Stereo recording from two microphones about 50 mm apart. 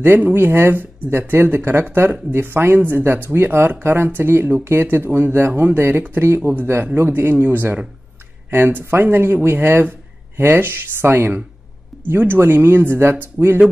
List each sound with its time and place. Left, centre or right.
0.3 s speech: right
5.5 s speech: right
5.8 s speech: right
7.1 s speech: right